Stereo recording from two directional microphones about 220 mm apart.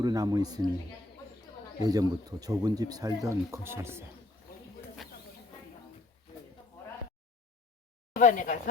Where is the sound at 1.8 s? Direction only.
15° right (ahead or behind).